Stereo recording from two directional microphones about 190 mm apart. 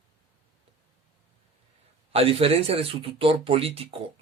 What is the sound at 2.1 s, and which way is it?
Speech, 30° right (ahead or behind).